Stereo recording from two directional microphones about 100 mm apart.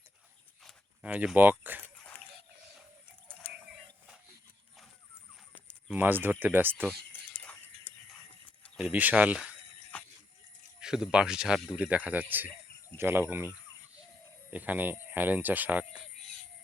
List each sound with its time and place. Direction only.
1.0 s speech: 10° right (ahead or behind)
1.8 s dog: 15° left (ahead or behind)
5.9 s speech: 20° right (ahead or behind)
7.3 s a sound: 15° left (ahead or behind)
8.9 s speech: 15° right (ahead or behind)
9.9 s goat: 15° left (ahead or behind)
10.8 s speech: 5° right (ahead or behind)
11.8 s speech: 15° right (ahead or behind)
14.5 s speech: 15° right (ahead or behind)